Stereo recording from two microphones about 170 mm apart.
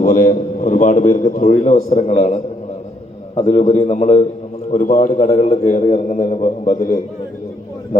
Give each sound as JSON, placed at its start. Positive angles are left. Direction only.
{"t": 0.0, "sound": "a man's voice", "side_deg": 55}